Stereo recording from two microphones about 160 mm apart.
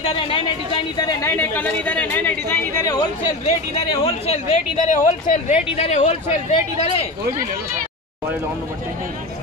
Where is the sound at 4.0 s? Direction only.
40° left (ahead or behind).